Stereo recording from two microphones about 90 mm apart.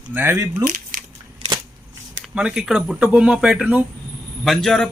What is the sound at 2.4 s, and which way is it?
Speech, 10° right (ahead or behind).